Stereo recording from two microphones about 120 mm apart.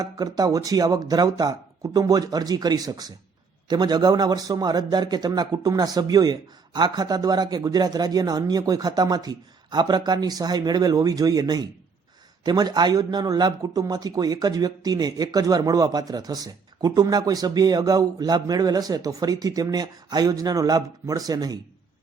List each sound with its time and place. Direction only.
0.0 s a man's voice: 35° right (ahead or behind)